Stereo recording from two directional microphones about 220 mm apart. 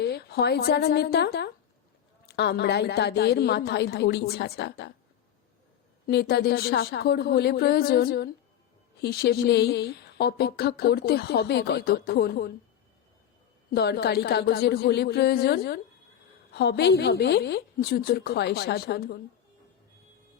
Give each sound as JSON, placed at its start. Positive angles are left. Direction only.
{"t": 0.0, "sound": "a woman's voice", "side_deg": 45}
{"t": 6.1, "sound": "a woman's voice", "side_deg": 50}
{"t": 13.7, "sound": "a woman's voice", "side_deg": 45}